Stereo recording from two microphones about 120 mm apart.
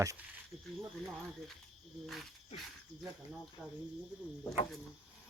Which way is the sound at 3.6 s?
Centre (ahead or behind).